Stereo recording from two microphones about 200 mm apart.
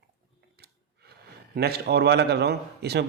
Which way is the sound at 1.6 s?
55° right (ahead or behind).